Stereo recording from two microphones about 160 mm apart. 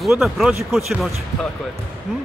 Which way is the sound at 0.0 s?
5° right (ahead or behind).